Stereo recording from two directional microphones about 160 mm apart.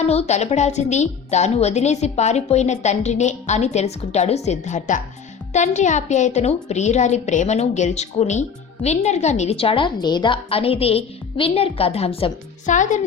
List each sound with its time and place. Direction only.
0.0 s a woman's voice: 45° left (ahead or behind)